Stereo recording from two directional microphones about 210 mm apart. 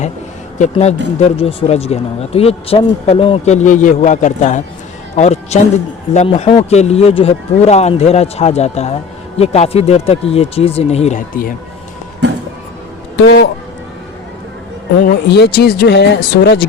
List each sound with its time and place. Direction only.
0.6 s speech: 30° left (ahead or behind)
13.1 s a man's voice: 55° left (ahead or behind)
15.0 s speech: 50° left (ahead or behind)